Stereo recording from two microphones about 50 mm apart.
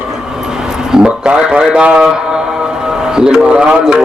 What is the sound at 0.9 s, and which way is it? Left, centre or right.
A man's voice, centre.